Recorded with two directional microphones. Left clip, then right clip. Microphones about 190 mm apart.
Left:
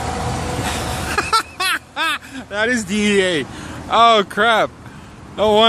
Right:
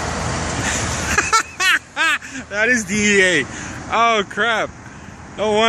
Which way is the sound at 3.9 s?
20° left (ahead or behind).